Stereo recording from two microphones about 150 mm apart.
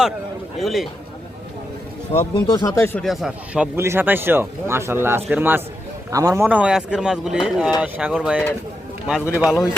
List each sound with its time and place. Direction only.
0.6 s speech: centre (ahead or behind)
2.3 s speech: 30° left (ahead or behind)
3.0 s speech: centre (ahead or behind)
3.8 s speech: 15° right (ahead or behind)